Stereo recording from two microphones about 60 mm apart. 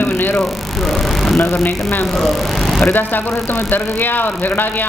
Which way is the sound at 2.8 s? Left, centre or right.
Left.